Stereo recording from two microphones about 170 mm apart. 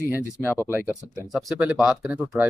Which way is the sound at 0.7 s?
10° right (ahead or behind).